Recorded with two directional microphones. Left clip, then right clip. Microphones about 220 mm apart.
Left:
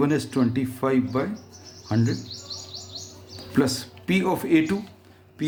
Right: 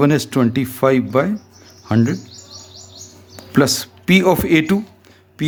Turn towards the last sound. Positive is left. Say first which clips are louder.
# right 6 dB
turn(degrees=-45)  # may be behind; listen again after turning